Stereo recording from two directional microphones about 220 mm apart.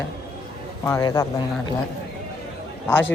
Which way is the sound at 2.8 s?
10° left (ahead or behind).